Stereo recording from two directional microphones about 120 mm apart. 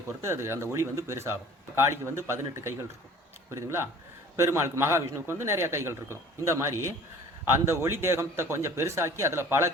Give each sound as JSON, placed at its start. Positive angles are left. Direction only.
{"t": 0.2, "sound": "a man's voice", "side_deg": -20}